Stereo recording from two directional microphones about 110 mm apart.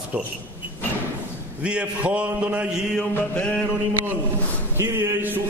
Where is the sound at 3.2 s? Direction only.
10° left (ahead or behind).